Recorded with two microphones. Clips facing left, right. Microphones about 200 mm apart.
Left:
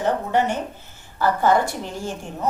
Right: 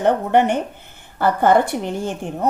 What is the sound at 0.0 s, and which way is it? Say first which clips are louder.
A woman's voice: right 5 dB; 60° right (ahead or behind).